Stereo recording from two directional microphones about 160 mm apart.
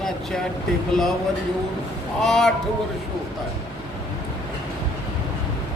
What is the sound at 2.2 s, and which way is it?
Speech, centre (ahead or behind).